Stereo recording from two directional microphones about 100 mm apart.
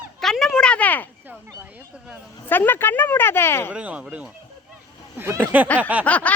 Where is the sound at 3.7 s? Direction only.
10° right (ahead or behind).